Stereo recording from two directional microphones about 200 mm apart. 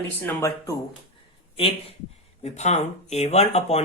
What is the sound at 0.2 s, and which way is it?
Speech, 10° left (ahead or behind).